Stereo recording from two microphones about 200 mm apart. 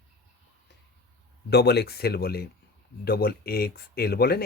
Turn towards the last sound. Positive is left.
turn(degrees=50)  # may be behind; listen again after turning